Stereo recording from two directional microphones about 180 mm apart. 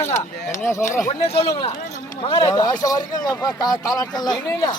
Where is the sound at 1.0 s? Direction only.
35° left (ahead or behind).